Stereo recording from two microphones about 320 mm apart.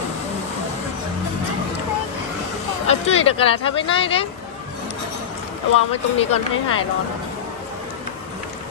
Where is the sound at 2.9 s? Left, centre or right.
Centre.